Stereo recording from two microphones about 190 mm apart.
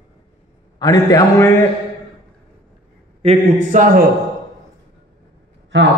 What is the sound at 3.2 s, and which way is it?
Speech, 30° right (ahead or behind).